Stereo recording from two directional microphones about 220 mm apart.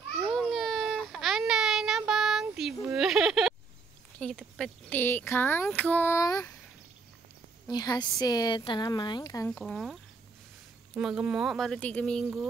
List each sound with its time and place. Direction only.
0.3 s child singing: centre (ahead or behind)
4.2 s speech: 5° left (ahead or behind)
7.6 s a woman's voice: 20° left (ahead or behind)
9.5 s speech: centre (ahead or behind)
11.0 s speech: 5° right (ahead or behind)